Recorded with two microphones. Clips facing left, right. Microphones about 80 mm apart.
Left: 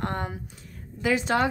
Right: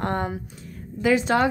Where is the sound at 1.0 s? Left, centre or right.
Right.